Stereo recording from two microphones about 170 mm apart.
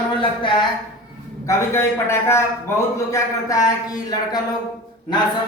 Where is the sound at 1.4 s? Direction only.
15° left (ahead or behind).